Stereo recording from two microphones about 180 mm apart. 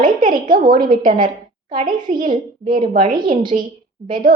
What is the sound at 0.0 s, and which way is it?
A child's voice, 50° right (ahead or behind).